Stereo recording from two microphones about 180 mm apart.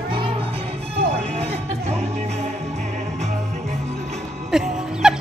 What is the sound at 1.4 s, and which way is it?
Music, 35° right (ahead or behind).